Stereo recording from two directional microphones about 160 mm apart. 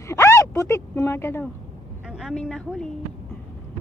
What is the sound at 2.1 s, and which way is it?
Speech, centre (ahead or behind).